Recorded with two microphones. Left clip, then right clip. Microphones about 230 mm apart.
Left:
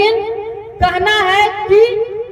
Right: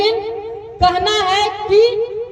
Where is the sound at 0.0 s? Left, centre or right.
Left.